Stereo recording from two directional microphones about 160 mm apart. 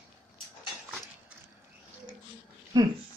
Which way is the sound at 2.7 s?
25° right (ahead or behind).